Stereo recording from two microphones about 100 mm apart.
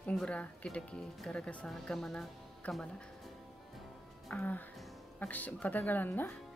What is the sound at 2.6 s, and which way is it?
Speech, 15° left (ahead or behind).